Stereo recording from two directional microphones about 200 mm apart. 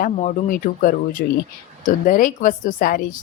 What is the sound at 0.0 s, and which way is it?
A woman's voice, 45° left (ahead or behind).